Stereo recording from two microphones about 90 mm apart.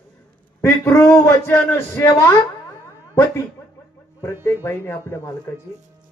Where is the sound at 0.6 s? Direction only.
30° left (ahead or behind).